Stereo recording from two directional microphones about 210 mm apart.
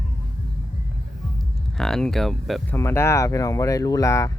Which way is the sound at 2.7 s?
10° left (ahead or behind).